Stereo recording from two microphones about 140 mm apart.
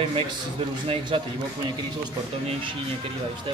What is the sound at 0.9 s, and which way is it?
Speech, 35° right (ahead or behind).